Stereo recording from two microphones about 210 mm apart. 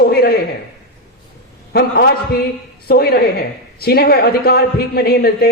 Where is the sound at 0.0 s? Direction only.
50° left (ahead or behind).